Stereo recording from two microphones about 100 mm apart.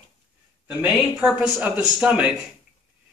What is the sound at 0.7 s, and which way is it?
Speech, 15° right (ahead or behind).